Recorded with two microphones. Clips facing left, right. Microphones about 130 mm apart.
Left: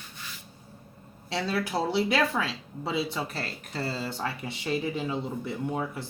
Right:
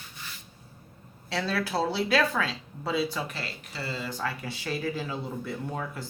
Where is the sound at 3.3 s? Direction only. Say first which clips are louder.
Left 3 dB; 45° left (ahead or behind); by 6.0 s 20° left (ahead or behind).